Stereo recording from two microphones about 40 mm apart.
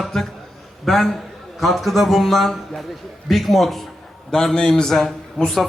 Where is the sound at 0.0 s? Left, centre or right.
Centre.